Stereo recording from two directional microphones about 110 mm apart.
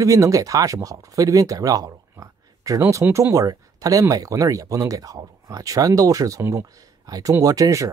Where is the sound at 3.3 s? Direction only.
30° right (ahead or behind).